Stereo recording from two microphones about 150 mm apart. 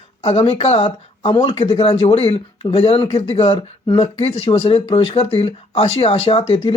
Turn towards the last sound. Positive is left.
turn(degrees=40)  # may be behind; listen again after turning